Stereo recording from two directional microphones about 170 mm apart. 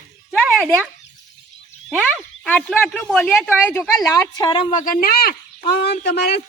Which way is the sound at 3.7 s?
15° left (ahead or behind).